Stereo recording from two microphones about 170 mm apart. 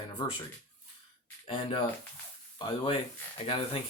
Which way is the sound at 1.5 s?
30° left (ahead or behind).